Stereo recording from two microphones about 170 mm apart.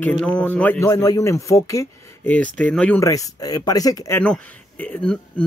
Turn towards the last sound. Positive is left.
turn(degrees=5)  # may be behind; listen again after turning